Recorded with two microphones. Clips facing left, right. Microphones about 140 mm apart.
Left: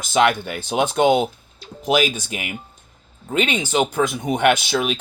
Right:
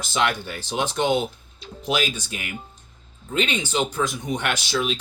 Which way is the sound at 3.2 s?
55° left (ahead or behind).